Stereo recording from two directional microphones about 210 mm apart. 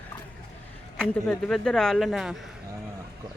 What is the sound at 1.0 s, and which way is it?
Speech, 5° left (ahead or behind).